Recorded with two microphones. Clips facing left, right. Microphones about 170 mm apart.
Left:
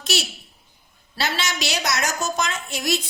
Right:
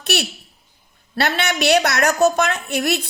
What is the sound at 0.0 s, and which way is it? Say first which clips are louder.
A woman's voice: right 4 dB; 60° right (ahead or behind).